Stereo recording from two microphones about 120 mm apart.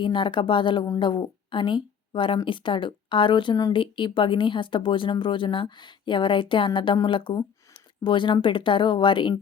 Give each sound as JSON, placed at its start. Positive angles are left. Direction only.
{"t": 0.0, "sound": "speech", "side_deg": 45}